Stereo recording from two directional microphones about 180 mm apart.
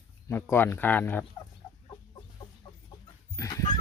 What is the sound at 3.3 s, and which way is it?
Chicken, 20° left (ahead or behind).